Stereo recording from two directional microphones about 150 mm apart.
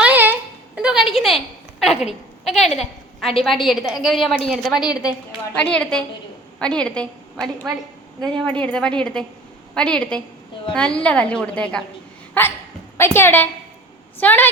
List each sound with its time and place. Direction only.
0.0 s a sound: 10° right (ahead or behind)
1.8 s a woman's voice: centre (ahead or behind)
12.3 s dog: 15° left (ahead or behind)
13.0 s a woman's voice: 15° left (ahead or behind)